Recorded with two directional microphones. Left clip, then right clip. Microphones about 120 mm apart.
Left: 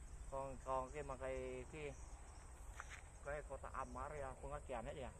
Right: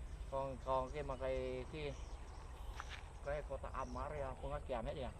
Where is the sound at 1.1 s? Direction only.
25° right (ahead or behind).